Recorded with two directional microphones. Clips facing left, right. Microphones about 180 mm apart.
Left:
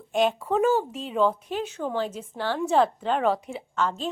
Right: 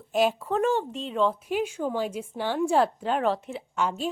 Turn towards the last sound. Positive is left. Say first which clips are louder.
# left 1 dB
turn(degrees=-15)  # may be behind; listen again after turning